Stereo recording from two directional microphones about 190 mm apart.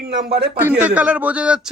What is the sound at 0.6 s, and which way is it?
A man's voice, 10° right (ahead or behind).